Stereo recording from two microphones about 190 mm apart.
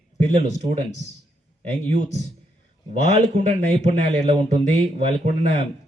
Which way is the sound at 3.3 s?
40° right (ahead or behind).